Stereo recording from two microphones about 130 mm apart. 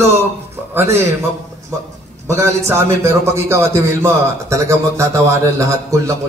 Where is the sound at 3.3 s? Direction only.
20° right (ahead or behind).